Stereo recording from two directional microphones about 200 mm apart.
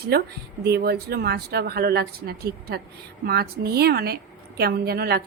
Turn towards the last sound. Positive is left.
turn(degrees=-50)  # may be behind; listen again after turning